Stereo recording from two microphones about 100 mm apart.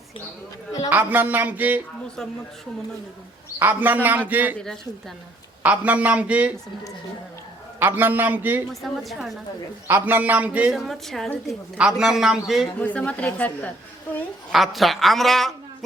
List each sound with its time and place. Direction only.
0.9 s speech: 20° right (ahead or behind)
3.6 s speech: 15° right (ahead or behind)
4.5 s a man's voice: 5° left (ahead or behind)
5.6 s speech: 15° right (ahead or behind)
7.8 s a man's voice: 20° right (ahead or behind)
8.7 s a man's voice: centre (ahead or behind)
9.8 s speech: 20° right (ahead or behind)
10.7 s a man's voice: centre (ahead or behind)
12.8 s a woman's voice: 15° left (ahead or behind)
14.5 s a man's voice: centre (ahead or behind)